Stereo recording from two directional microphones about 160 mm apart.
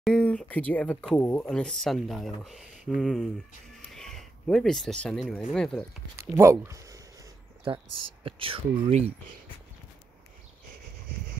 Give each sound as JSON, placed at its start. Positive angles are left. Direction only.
{"t": 0.0, "sound": "speech", "side_deg": 5}
{"t": 3.7, "sound": "music", "side_deg": 5}
{"t": 5.0, "sound": "speech", "side_deg": 5}
{"t": 6.1, "sound": "speech", "side_deg": -15}
{"t": 7.6, "sound": "speech", "side_deg": -35}